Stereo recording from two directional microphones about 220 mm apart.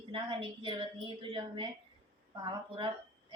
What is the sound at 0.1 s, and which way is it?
A woman's voice, 25° right (ahead or behind).